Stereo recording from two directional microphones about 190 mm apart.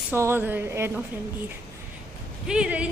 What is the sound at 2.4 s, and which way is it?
Speech, 5° right (ahead or behind).